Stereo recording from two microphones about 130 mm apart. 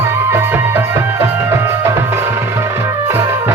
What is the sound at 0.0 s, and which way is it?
Music, 20° right (ahead or behind).